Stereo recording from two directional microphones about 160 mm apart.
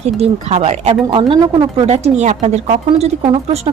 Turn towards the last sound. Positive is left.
turn(degrees=-40)  # may be behind; listen again after turning